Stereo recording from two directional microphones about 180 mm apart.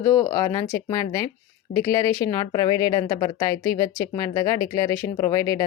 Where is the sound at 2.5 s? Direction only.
20° left (ahead or behind).